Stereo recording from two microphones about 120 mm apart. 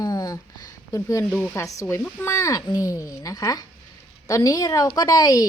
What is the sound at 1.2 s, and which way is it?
A woman's voice, 15° left (ahead or behind).